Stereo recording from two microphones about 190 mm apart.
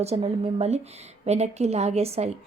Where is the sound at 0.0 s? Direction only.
35° right (ahead or behind).